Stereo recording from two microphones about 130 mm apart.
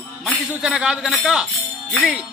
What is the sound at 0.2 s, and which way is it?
Music, 5° right (ahead or behind).